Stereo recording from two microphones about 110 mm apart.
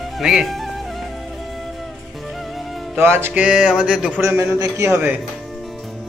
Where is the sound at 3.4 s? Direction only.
10° right (ahead or behind).